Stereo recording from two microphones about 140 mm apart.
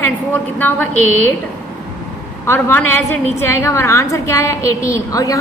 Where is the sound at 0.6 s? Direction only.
15° left (ahead or behind).